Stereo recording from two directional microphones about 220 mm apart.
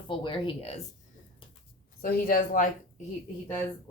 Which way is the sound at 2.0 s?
40° left (ahead or behind).